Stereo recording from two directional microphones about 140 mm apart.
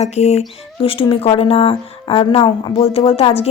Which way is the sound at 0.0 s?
50° left (ahead or behind).